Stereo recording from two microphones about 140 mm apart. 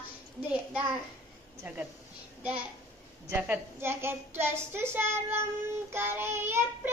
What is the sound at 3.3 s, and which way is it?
A woman's voice, 15° right (ahead or behind).